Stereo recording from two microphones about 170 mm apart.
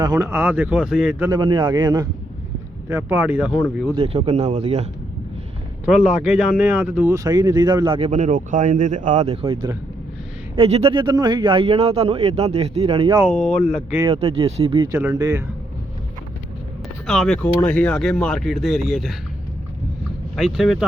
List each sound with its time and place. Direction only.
0.0 s speech: 20° right (ahead or behind)
1.3 s speech: 25° right (ahead or behind)
2.9 s speech: 10° right (ahead or behind)
3.9 s speech: 35° right (ahead or behind)
5.8 s speech: 5° right (ahead or behind)
7.3 s speech: 25° right (ahead or behind)
13.3 s speech: 5° left (ahead or behind)
14.1 s speech: 35° right (ahead or behind)
14.9 s speech: 15° right (ahead or behind)
17.1 s speech: centre (ahead or behind)
20.3 s speech: centre (ahead or behind)